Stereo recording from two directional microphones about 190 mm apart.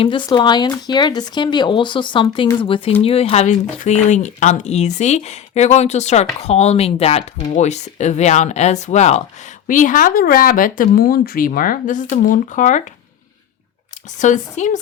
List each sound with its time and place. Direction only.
0.0 s speech: 25° left (ahead or behind); by 12.8 s 40° left (ahead or behind)
14.2 s speech: 40° left (ahead or behind)